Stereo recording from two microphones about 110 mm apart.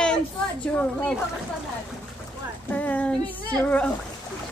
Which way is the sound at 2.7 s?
15° left (ahead or behind).